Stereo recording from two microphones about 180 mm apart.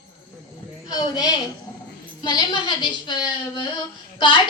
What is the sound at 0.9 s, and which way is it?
A woman's voice, 20° left (ahead or behind).